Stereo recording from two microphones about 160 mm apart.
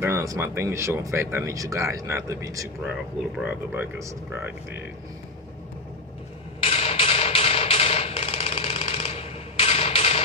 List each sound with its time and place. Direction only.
0.0 s speech: 20° right (ahead or behind)
6.6 s music: 40° left (ahead or behind)